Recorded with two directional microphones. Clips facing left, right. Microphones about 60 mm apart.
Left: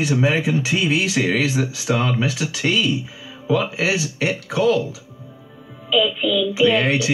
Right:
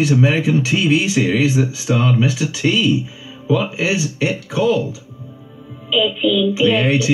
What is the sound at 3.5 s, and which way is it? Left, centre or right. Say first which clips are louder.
Speech: right 2 dB; left.